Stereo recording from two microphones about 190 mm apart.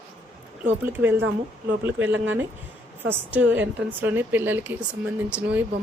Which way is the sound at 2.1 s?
90° right.